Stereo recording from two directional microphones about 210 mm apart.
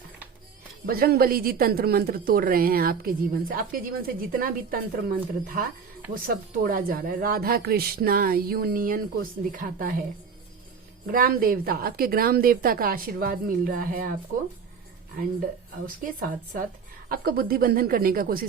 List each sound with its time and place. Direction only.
0.9 s a woman's voice: 45° right (ahead or behind)
11.0 s a woman's voice: 45° right (ahead or behind)
16.0 s a woman's voice: 40° right (ahead or behind)